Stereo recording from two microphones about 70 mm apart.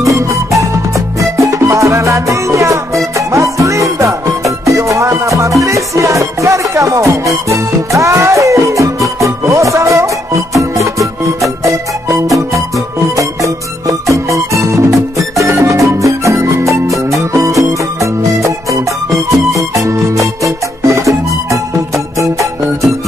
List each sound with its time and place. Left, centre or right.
0.0 s music: right
11.4 s music: right